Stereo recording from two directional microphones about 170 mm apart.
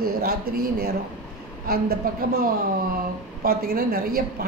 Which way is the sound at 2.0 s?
55° right (ahead or behind).